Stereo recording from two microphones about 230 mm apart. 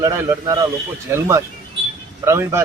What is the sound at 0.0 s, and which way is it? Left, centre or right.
Speech, centre.